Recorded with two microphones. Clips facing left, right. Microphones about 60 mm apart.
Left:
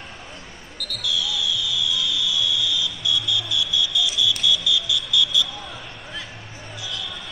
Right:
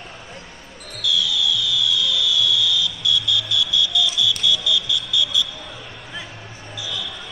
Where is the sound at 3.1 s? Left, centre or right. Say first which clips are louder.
Right 2 dB; centre.